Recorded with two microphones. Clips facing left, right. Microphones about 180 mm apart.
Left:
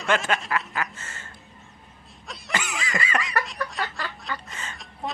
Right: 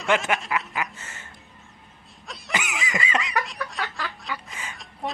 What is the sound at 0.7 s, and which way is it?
Duck, 15° right (ahead or behind).